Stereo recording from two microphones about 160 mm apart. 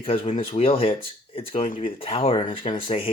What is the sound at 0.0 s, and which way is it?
Speech, 35° left (ahead or behind).